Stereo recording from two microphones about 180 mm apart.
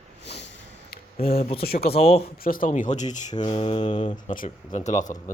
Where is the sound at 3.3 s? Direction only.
25° left (ahead or behind).